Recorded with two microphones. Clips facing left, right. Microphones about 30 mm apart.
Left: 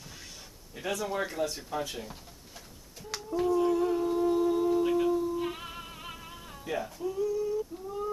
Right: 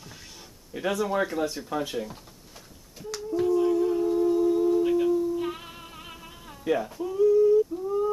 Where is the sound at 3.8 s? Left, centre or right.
Centre.